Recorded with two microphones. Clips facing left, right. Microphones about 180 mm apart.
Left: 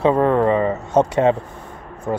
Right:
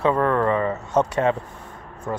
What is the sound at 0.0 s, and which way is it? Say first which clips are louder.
Speech: left 4 dB; 25° left (ahead or behind).